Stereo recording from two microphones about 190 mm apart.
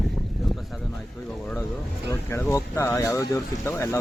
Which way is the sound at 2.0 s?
15° left (ahead or behind).